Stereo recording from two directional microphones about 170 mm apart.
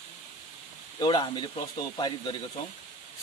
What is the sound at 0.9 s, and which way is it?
A man's voice, 25° left (ahead or behind).